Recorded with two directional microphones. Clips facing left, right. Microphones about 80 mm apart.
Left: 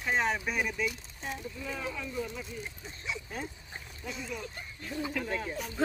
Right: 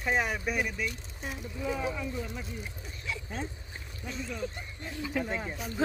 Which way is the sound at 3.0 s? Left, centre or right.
Centre.